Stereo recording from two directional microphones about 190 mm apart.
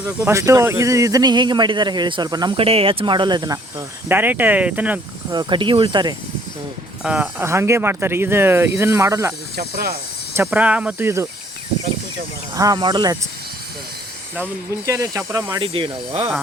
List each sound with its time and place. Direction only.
0.3 s speech: 15° right (ahead or behind)
5.3 s speech: 25° right (ahead or behind)
7.0 s speech: 5° right (ahead or behind)
9.6 s speech: 55° right (ahead or behind)
10.4 s speech: 5° right (ahead or behind)
12.5 s speech: 20° right (ahead or behind)
14.8 s speech: 15° right (ahead or behind)